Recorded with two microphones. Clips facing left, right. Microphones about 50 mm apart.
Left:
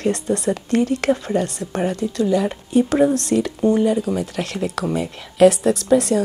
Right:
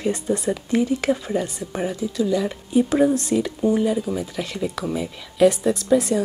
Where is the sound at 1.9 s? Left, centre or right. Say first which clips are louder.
Left 2 dB; left.